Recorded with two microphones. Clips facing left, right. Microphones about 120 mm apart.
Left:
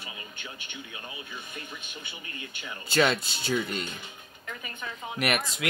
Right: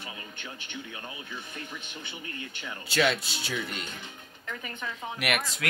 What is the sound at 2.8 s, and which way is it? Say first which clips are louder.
Speech: left 2 dB; 45° left (ahead or behind).